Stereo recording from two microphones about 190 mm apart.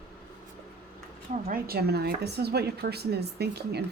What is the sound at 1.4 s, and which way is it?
Speech, 50° right (ahead or behind).